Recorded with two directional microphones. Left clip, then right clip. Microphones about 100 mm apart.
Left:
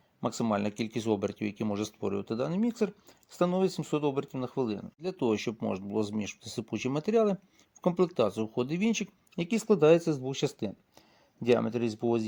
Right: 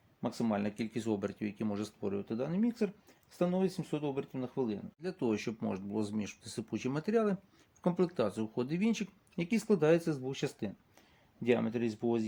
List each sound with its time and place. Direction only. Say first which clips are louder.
0.2 s speech: left 5 dB; 90° left
5.0 s speech: left 5 dB; 45° left (ahead or behind)